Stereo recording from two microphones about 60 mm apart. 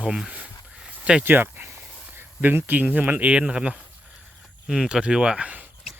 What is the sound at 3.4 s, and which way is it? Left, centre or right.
Speech, centre.